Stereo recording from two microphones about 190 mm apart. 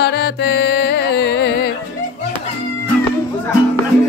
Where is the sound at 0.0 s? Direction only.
60° left (ahead or behind).